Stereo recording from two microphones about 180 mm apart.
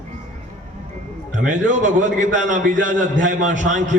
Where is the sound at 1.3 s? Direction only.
45° right (ahead or behind).